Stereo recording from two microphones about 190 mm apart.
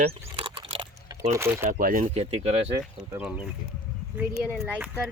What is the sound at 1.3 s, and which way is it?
Speech, 15° right (ahead or behind).